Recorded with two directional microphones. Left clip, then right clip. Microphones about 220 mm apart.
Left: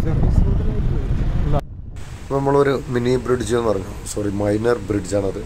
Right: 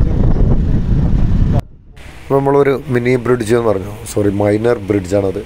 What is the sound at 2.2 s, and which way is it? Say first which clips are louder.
A man's voice: right 5 dB; 25° right (ahead or behind).